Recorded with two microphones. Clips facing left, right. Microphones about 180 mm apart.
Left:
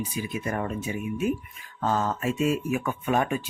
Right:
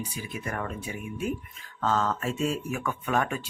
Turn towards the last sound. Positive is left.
turn(degrees=20)  # may be behind; listen again after turning